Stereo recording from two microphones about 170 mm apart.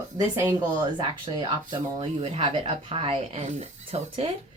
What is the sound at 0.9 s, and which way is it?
Speech, 25° right (ahead or behind).